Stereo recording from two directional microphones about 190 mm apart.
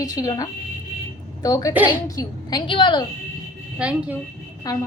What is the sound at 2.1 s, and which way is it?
Speech, 20° left (ahead or behind).